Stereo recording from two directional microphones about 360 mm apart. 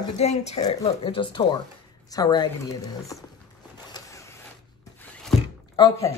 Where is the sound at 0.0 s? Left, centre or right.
Centre.